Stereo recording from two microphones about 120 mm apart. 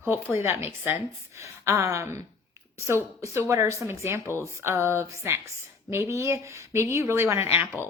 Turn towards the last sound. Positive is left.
turn(degrees=-20)  # may be behind; listen again after turning